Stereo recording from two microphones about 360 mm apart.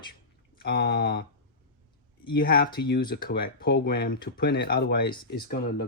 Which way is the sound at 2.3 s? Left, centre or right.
Left.